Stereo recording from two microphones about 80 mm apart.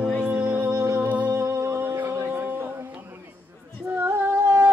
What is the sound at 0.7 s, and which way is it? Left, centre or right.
Music, right.